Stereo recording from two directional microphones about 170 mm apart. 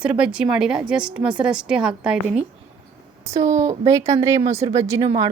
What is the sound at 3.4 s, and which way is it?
Speech, 45° right (ahead or behind).